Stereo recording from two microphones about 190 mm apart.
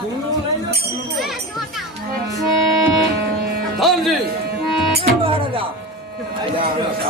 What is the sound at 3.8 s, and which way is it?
Music, centre (ahead or behind).